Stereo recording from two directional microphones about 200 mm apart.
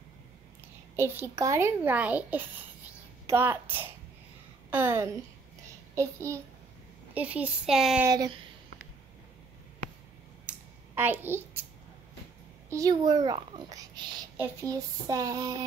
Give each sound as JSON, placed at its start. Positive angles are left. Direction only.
{"t": 0.9, "sound": "a child's voice", "side_deg": -10}
{"t": 8.1, "sound": "a child's voice", "side_deg": -20}
{"t": 11.0, "sound": "a child's voice", "side_deg": -10}
{"t": 12.6, "sound": "a child's voice", "side_deg": -15}